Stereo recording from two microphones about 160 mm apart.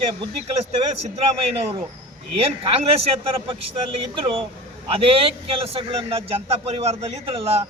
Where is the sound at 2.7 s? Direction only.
40° right (ahead or behind).